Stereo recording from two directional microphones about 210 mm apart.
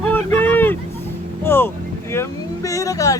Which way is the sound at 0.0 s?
5° left (ahead or behind).